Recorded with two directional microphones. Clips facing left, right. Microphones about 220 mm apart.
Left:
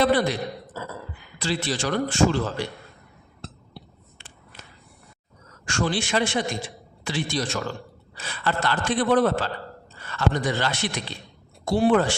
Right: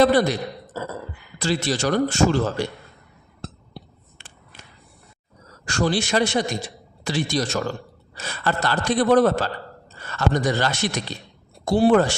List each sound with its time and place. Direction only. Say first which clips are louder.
0.0 s a man's voice: right 4 dB; 40° right (ahead or behind)
3.4 s a sound: right 4 dB; 45° right (ahead or behind)
5.5 s a man's voice: right 3 dB; 35° right (ahead or behind)